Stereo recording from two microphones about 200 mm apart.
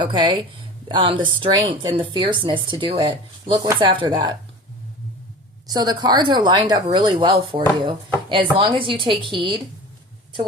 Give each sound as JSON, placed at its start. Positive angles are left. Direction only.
{"t": 0.0, "sound": "speech", "side_deg": -20}
{"t": 5.6, "sound": "speech", "side_deg": -20}